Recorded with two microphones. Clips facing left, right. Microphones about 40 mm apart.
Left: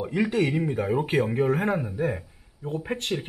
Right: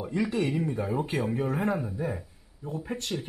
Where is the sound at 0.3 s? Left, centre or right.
Left.